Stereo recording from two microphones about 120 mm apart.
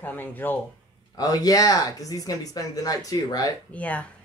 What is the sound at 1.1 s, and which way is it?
Speech, 30° left (ahead or behind).